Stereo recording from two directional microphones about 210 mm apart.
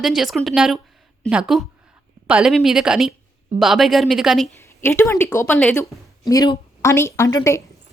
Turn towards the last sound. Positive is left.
turn(degrees=15)  # may be behind; listen again after turning